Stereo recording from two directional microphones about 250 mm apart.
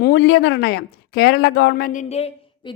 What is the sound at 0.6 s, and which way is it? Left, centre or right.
Speech, left.